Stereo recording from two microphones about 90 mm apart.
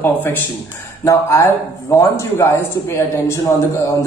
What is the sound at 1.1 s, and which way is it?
Speech, 30° left (ahead or behind).